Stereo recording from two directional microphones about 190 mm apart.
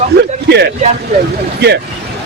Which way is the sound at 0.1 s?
60° right (ahead or behind).